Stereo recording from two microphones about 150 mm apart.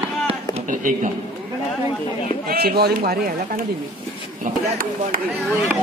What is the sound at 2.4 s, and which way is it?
Speech, 90° right.